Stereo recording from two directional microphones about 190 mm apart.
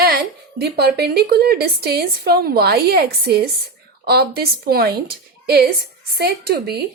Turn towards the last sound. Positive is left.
turn(degrees=-55)  # may be behind; listen again after turning